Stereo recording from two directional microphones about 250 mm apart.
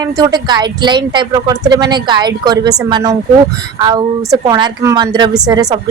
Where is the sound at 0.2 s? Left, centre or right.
Centre.